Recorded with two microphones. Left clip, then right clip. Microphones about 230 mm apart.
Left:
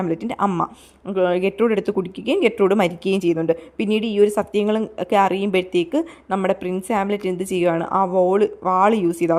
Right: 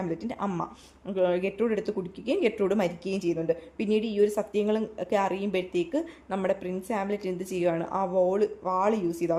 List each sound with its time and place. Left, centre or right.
0.0 s speech: left